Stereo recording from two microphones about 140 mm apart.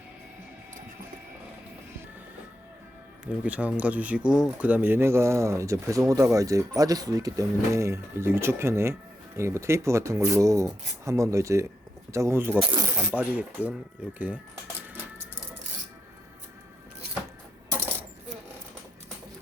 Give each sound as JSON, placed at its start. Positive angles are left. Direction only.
{"t": 3.4, "sound": "speech", "side_deg": -10}
{"t": 12.5, "sound": "speech", "side_deg": -40}
{"t": 13.0, "sound": "speech", "side_deg": -10}